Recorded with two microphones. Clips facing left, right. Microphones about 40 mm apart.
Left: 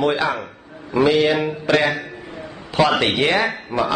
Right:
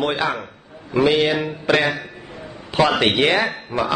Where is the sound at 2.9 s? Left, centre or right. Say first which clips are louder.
Right 1 dB; centre.